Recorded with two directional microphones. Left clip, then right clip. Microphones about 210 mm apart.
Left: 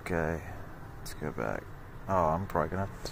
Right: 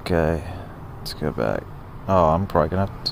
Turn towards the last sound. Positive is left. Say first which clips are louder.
# right 11 dB
turn(degrees=-15)  # may be behind; listen again after turning